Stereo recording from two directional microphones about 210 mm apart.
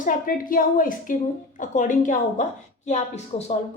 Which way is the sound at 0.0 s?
40° left (ahead or behind).